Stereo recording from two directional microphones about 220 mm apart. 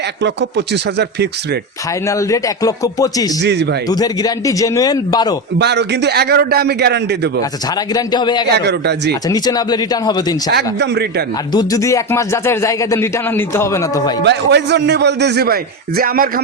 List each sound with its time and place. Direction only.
0.2 s a man's voice: 50° right (ahead or behind)
2.0 s speech: 15° left (ahead or behind)
3.4 s a man's voice: 50° right (ahead or behind)
3.8 s speech: 15° left (ahead or behind)
5.5 s a man's voice: 50° right (ahead or behind)
7.9 s a man's voice: 20° left (ahead or behind)
8.5 s a man's voice: 50° right (ahead or behind)
9.3 s speech: 20° left (ahead or behind)
10.5 s a man's voice: 50° right (ahead or behind)
11.5 s speech: 15° left (ahead or behind)
14.3 s a man's voice: 50° right (ahead or behind)